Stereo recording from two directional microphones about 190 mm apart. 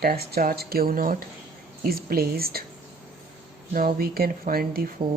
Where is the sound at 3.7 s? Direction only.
50° right (ahead or behind).